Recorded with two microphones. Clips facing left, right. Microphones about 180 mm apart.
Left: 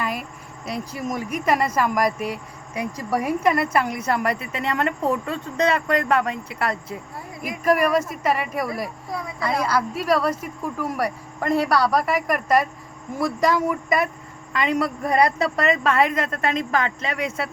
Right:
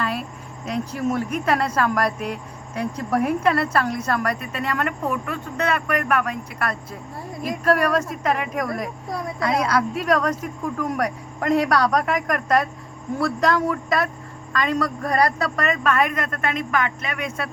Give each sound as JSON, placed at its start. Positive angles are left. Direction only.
{"t": 0.0, "sound": "a woman's voice", "side_deg": 10}
{"t": 7.4, "sound": "a woman's voice", "side_deg": 10}